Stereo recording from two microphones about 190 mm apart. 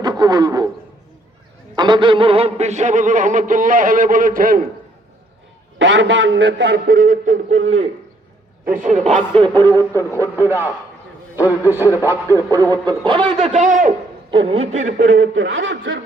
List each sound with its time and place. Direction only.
0.0 s a sound: 20° right (ahead or behind)
1.7 s a man's voice: 25° right (ahead or behind); by 4.6 s 45° right (ahead or behind)
5.8 s a man's voice: 75° right (ahead or behind); by 7.9 s 35° right (ahead or behind)
8.6 s a man's voice: 45° right (ahead or behind)
9.7 s speech: 15° left (ahead or behind)
10.1 s speech: 15° right (ahead or behind)
11.3 s speech: 15° left (ahead or behind)
12.0 s a man's voice: 15° right (ahead or behind); by 13.9 s 45° right (ahead or behind)
14.3 s a man's voice: 30° right (ahead or behind)
15.0 s speech: 80° right